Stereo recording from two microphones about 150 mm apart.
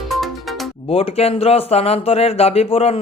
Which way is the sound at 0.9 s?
40° left (ahead or behind).